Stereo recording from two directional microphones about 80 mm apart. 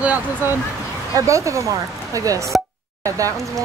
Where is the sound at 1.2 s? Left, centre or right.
Right.